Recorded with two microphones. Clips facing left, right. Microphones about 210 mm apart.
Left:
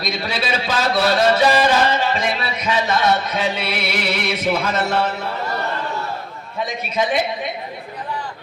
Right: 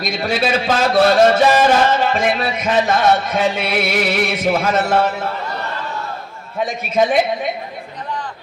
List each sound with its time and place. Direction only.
0.0 s a man's voice: 50° right (ahead or behind)